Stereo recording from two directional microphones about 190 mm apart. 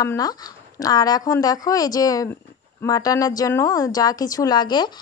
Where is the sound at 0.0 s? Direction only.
20° left (ahead or behind).